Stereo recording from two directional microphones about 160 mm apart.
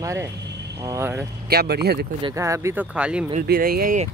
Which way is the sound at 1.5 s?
85° right.